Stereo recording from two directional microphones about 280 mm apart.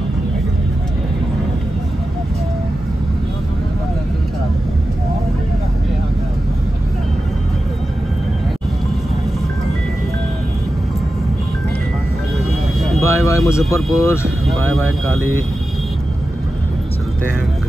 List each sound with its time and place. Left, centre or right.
13.0 s vehicle: centre
13.9 s speech: centre
15.1 s speech: right